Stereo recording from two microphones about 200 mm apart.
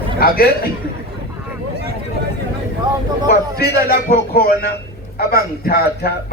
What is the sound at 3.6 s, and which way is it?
A man's voice, 50° left (ahead or behind).